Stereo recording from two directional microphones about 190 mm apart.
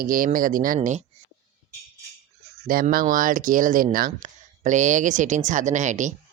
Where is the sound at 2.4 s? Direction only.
50° right (ahead or behind).